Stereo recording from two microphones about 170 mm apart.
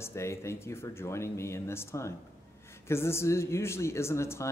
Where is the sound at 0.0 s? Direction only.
15° left (ahead or behind).